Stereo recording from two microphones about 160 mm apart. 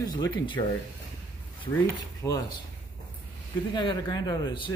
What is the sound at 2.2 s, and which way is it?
Speech, 20° left (ahead or behind).